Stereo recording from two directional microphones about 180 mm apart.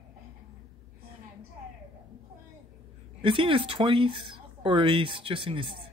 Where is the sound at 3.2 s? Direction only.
30° right (ahead or behind).